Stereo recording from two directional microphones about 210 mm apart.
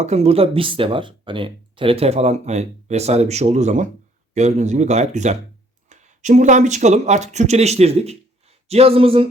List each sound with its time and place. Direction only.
0.0 s speech: 30° right (ahead or behind)